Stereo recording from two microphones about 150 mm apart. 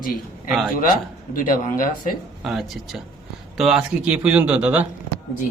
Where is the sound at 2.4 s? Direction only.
Centre (ahead or behind).